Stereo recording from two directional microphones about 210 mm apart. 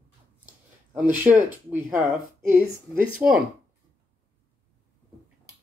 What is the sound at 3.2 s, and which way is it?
Speech, 5° right (ahead or behind).